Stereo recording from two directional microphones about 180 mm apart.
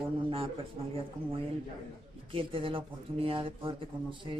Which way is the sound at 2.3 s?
30° right (ahead or behind).